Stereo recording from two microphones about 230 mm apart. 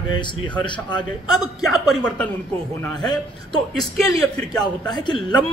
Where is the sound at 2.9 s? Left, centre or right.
Centre.